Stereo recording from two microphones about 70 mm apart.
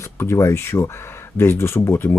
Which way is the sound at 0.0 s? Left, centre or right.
Left.